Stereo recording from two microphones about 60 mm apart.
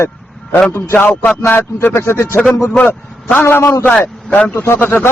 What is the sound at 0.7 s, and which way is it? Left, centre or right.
Speech, left.